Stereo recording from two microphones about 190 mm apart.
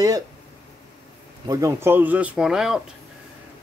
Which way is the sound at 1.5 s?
15° right (ahead or behind).